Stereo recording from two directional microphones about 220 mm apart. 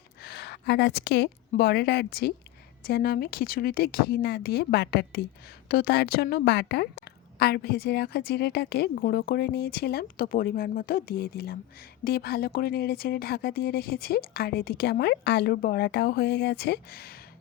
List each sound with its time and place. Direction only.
0.2 s a woman's voice: 50° left (ahead or behind)